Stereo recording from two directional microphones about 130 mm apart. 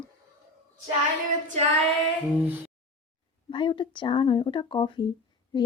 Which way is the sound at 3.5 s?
40° left (ahead or behind).